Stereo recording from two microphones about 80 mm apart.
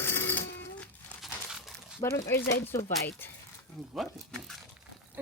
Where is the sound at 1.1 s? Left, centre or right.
Centre.